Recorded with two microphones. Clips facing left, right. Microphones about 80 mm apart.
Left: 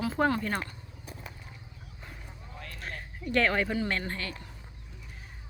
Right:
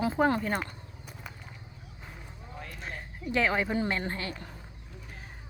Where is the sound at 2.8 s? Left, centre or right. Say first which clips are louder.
Left 1 dB; centre.